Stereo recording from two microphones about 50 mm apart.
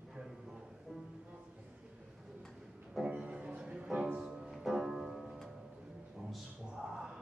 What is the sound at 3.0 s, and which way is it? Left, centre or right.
Music, right.